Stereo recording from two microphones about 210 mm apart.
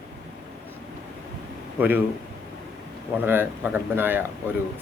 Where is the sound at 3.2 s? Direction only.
10° right (ahead or behind).